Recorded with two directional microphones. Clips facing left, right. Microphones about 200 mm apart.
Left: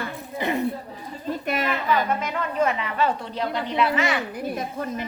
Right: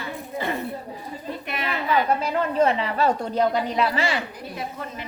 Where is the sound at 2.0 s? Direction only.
35° right (ahead or behind).